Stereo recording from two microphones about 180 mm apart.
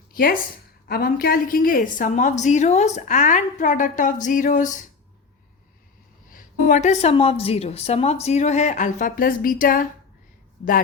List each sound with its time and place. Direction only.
0.1 s a woman's voice: 55° left (ahead or behind)
6.3 s a woman's voice: 45° left (ahead or behind)